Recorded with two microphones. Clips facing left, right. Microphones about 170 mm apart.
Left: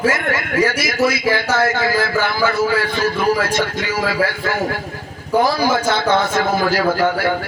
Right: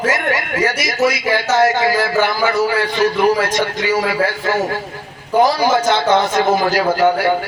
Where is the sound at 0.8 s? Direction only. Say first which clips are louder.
Even; 20° right (ahead or behind).